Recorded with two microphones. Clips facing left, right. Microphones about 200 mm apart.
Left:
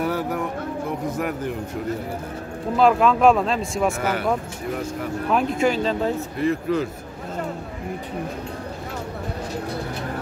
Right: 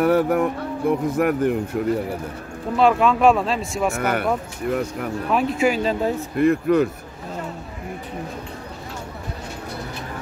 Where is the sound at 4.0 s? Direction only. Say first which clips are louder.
Right 2 dB; 60° right (ahead or behind).